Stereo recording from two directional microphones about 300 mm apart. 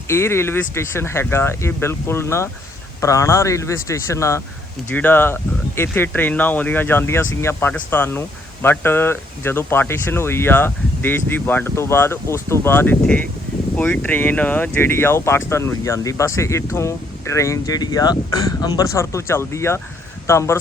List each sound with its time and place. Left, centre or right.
0.1 s speech: centre